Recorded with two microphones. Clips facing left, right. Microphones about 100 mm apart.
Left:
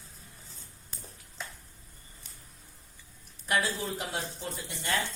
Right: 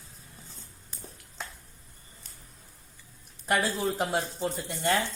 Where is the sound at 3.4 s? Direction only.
50° right (ahead or behind).